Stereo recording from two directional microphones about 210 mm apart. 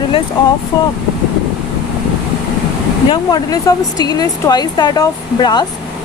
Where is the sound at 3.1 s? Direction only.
20° left (ahead or behind).